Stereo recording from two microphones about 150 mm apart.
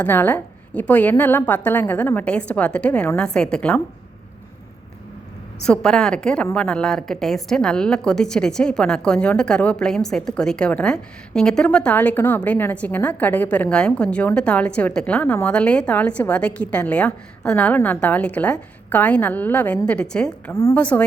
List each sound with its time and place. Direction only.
0.0 s a woman's voice: 10° left (ahead or behind)
5.6 s a woman's voice: 5° left (ahead or behind)
20.5 s a woman's voice: 15° left (ahead or behind)